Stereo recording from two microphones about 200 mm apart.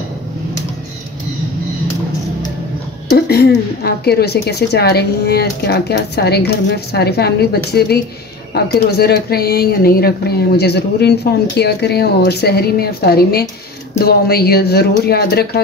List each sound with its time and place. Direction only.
3.3 s a woman's voice: 50° left (ahead or behind)